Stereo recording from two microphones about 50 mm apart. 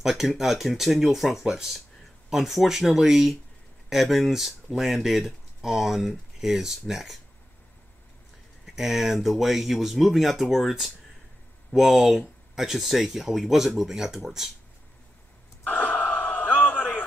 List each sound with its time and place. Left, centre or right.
0.0 s speech: centre
8.6 s speech: centre
15.6 s gasp: left